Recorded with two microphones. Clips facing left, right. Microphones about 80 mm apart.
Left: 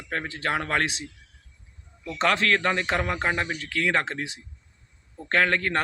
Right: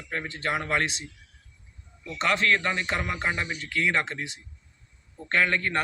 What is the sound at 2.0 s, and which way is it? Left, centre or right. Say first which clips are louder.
Speech: left 2 dB; left.